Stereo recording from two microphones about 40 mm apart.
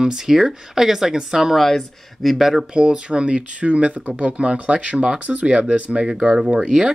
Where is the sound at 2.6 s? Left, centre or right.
Right.